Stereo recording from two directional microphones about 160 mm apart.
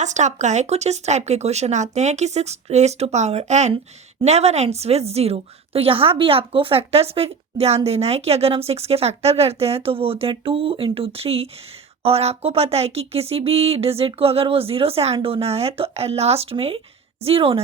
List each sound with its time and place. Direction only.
0.0 s a woman's voice: 45° right (ahead or behind)